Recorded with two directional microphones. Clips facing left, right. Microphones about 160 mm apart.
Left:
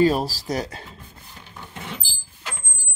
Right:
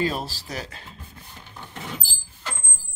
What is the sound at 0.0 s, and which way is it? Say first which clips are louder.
Speech: left 8 dB; 40° left (ahead or behind).